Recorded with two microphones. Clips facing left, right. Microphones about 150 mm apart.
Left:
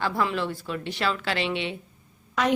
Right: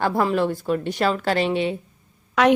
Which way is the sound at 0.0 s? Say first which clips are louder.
Right 6 dB; 45° right (ahead or behind).